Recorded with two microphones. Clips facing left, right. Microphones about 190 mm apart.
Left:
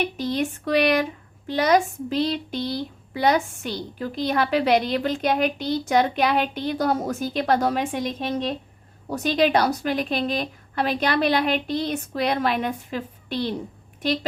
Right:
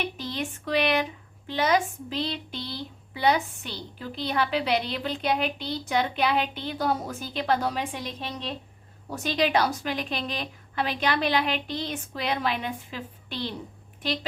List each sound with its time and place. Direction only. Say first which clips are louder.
0.2 s a woman's voice: left 8 dB; 40° left (ahead or behind)